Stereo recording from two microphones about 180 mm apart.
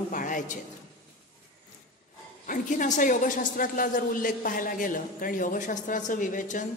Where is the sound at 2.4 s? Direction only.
45° left (ahead or behind).